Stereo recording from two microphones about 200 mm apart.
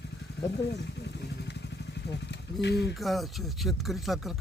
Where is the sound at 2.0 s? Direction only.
60° left (ahead or behind).